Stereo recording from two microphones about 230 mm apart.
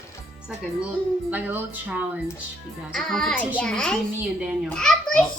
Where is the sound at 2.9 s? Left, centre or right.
Centre.